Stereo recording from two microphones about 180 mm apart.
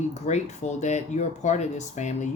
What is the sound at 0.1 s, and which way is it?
Speech, 40° left (ahead or behind).